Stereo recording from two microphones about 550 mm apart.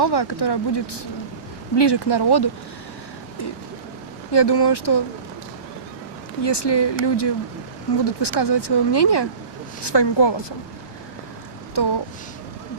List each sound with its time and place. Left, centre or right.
0.0 s speech: left
4.3 s speech: left
6.4 s speech: left
11.7 s a sound: left